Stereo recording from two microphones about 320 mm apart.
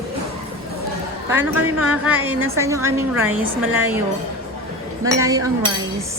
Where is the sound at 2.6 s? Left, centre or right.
Centre.